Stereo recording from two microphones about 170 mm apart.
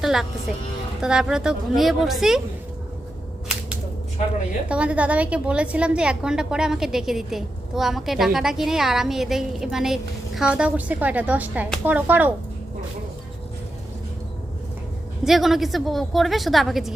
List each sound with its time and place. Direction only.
0.0 s livestock: centre (ahead or behind)
1.0 s a woman's voice: 5° right (ahead or behind)
4.2 s a woman's voice: 45° left (ahead or behind)
4.7 s a woman's voice: 5° right (ahead or behind)
15.2 s a woman's voice: centre (ahead or behind)